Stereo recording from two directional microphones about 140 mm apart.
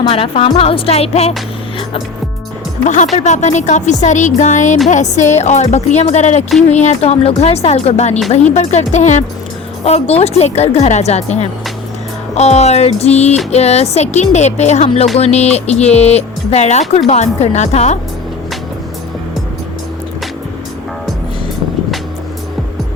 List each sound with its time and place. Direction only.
0.1 s speech: 45° left (ahead or behind)
2.8 s speech: 60° left (ahead or behind)